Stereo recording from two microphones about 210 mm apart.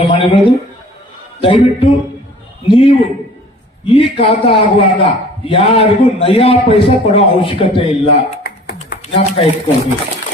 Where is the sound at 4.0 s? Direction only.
25° left (ahead or behind).